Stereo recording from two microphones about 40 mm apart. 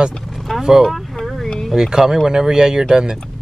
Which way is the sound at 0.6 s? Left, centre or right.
Centre.